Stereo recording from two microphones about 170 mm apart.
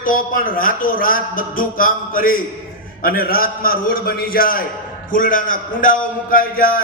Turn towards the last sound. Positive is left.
turn(degrees=60)  # may be behind; listen again after turning